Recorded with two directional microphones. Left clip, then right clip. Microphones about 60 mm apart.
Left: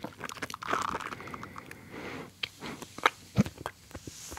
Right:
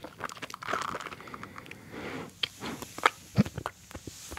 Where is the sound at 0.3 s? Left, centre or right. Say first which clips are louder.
Left 2 dB; left.